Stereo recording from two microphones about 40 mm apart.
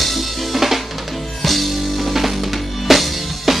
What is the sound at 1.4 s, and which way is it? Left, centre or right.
Music, centre.